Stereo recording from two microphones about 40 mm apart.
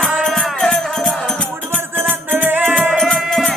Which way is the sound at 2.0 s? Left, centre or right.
Right.